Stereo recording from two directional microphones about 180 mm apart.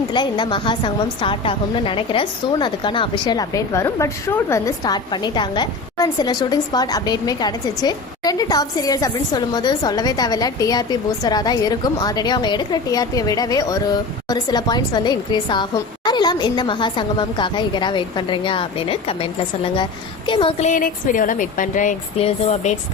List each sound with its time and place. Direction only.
0.1 s a woman's voice: 25° left (ahead or behind)